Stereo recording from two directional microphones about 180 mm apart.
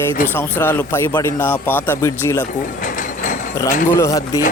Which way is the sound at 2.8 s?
45° left (ahead or behind).